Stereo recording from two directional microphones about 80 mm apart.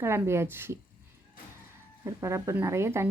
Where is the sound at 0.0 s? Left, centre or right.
Right.